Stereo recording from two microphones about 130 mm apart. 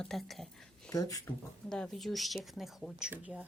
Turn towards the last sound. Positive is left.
turn(degrees=-10)  # may be behind; listen again after turning